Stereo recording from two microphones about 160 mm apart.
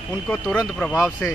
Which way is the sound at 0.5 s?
10° left (ahead or behind).